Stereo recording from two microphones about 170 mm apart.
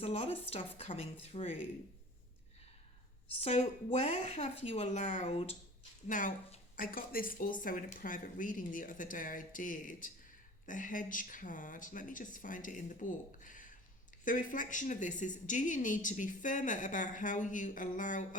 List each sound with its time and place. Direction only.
0.0 s a woman's voice: 35° left (ahead or behind)
3.4 s a woman's voice: 40° left (ahead or behind)
6.1 s a woman's voice: 50° left (ahead or behind)